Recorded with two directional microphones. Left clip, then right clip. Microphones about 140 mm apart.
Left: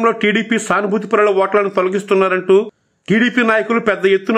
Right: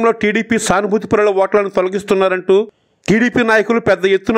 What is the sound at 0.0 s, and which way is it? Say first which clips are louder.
A man's voice: even; 40° right (ahead or behind).